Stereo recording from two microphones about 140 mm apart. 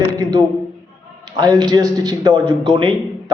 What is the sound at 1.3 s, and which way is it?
A man's voice, 30° right (ahead or behind).